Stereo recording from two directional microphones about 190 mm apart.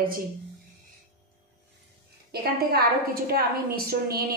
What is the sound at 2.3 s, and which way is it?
A woman's voice, 55° right (ahead or behind).